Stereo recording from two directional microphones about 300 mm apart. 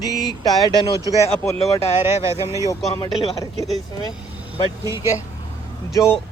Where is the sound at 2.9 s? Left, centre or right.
Centre.